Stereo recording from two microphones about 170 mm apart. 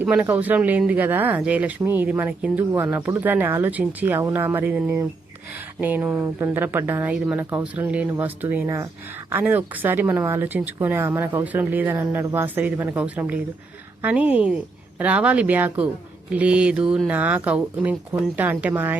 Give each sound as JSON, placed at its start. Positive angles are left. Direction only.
{"t": 0.0, "sound": "speech", "side_deg": -10}